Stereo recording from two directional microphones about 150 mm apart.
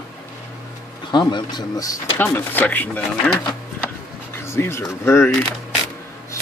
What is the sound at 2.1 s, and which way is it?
Speech, 10° left (ahead or behind).